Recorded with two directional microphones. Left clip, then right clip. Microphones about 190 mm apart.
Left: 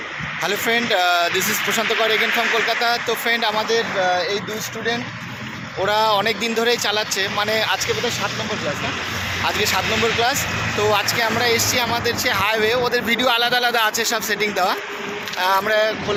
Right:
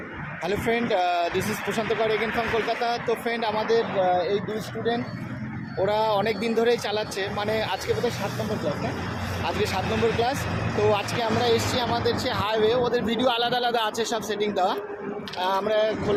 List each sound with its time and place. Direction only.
0.4 s speech: 10° left (ahead or behind)
5.8 s speech: 5° left (ahead or behind)
9.4 s speech: 15° left (ahead or behind)